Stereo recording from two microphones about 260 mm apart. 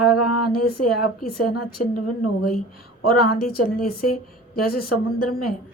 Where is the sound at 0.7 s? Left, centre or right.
Left.